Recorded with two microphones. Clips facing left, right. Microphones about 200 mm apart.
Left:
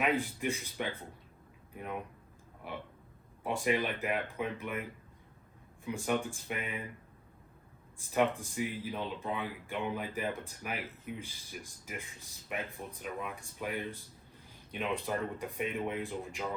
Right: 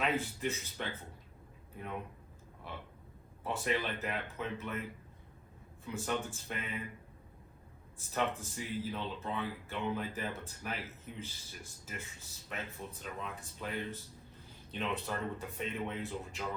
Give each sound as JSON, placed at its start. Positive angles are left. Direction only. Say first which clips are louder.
{"t": 0.0, "sound": "speech", "louder": "left 3 dB", "side_deg": 15}
{"t": 2.6, "sound": "speech", "louder": "left 4 dB", "side_deg": 15}
{"t": 5.8, "sound": "speech", "louder": "left 4 dB", "side_deg": 15}
{"t": 7.9, "sound": "speech", "louder": "left 5 dB", "side_deg": 15}